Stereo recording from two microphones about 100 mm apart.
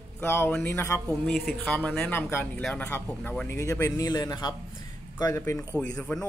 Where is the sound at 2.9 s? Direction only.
20° left (ahead or behind).